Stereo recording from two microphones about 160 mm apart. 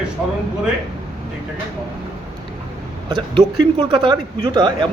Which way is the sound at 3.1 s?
30° right (ahead or behind).